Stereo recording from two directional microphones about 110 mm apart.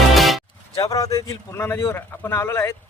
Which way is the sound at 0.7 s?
30° left (ahead or behind).